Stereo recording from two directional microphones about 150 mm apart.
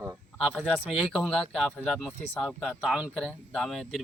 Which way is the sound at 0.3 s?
5° right (ahead or behind).